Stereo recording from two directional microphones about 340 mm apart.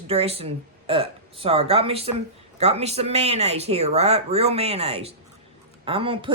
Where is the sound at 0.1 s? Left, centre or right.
Centre.